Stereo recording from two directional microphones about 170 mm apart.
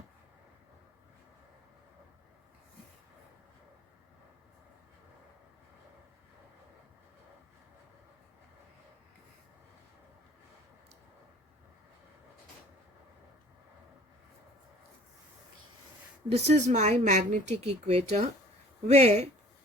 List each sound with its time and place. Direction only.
16.3 s speech: 40° right (ahead or behind)